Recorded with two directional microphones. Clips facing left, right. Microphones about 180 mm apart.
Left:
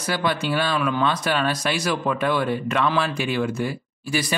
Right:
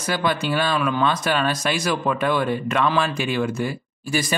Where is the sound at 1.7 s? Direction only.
15° right (ahead or behind).